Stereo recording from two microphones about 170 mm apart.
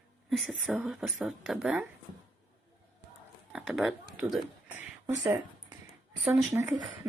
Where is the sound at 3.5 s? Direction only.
5° right (ahead or behind).